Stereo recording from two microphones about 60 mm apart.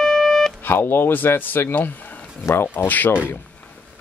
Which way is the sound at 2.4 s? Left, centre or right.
Left.